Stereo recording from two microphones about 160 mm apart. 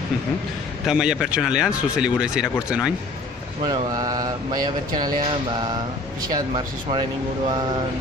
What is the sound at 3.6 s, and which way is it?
Speech, 25° right (ahead or behind).